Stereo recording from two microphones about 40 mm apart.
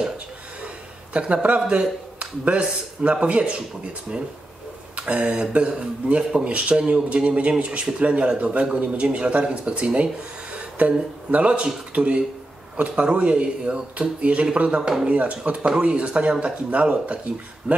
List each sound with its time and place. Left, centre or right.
1.1 s speech: right
4.9 s speech: right
14.8 s speech: centre
15.0 s speech: right